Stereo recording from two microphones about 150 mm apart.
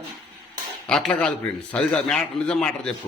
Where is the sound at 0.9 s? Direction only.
5° left (ahead or behind).